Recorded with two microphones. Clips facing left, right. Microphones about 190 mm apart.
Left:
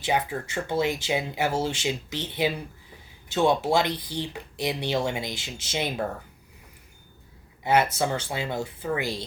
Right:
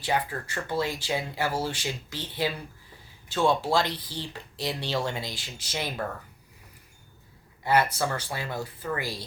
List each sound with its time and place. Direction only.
0.0 s speech: 20° left (ahead or behind)
7.6 s speech: 20° left (ahead or behind)